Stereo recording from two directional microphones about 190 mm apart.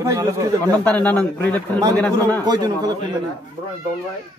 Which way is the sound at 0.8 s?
5° left (ahead or behind).